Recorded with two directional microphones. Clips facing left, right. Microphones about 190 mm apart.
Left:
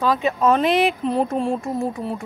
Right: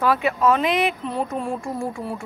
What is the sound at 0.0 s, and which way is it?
Speech, 20° left (ahead or behind).